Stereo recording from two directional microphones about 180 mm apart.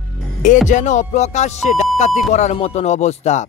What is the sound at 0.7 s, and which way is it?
Speech, 45° left (ahead or behind).